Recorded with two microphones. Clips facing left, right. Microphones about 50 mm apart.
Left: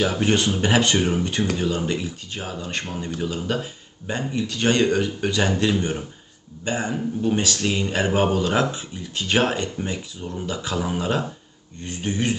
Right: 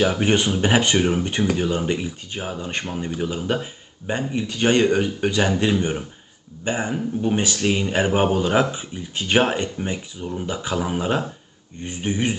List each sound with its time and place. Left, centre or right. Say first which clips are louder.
0.0 s speech: right 2 dB; centre